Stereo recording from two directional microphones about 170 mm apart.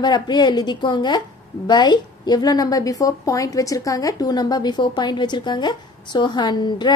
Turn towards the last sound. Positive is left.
turn(degrees=25)  # may be behind; listen again after turning